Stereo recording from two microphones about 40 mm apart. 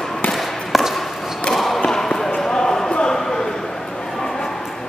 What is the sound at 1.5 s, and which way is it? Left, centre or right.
Basketball bounce, centre.